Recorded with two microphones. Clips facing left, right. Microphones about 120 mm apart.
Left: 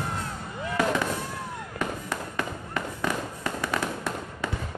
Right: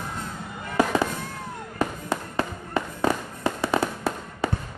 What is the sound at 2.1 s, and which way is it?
Fireworks, 30° right (ahead or behind).